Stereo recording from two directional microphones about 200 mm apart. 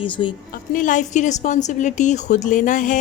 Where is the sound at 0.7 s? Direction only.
40° left (ahead or behind).